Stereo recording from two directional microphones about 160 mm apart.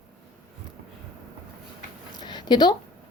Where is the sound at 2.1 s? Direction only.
25° left (ahead or behind).